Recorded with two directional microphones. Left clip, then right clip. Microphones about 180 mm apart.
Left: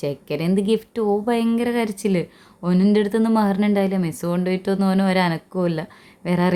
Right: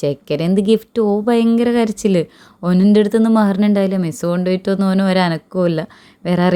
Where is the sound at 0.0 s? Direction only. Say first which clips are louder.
Right 6 dB; 30° right (ahead or behind).